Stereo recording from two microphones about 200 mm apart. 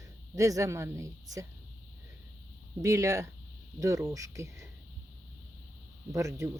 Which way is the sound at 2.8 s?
15° right (ahead or behind).